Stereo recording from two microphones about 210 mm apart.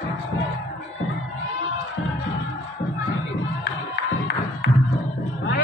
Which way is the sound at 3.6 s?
55° left (ahead or behind).